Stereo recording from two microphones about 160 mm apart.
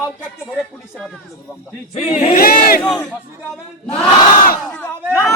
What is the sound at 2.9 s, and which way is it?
Speech, 5° left (ahead or behind).